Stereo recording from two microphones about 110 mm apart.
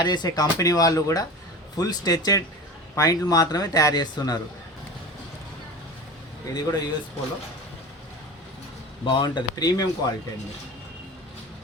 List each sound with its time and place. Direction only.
0.0 s speech: 40° left (ahead or behind)
6.5 s speech: 35° left (ahead or behind)
9.0 s speech: 45° left (ahead or behind)